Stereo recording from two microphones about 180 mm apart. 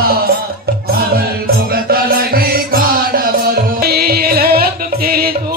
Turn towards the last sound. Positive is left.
turn(degrees=-55)  # may be behind; listen again after turning